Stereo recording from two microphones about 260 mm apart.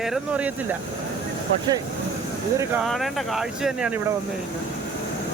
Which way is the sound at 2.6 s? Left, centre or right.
Centre.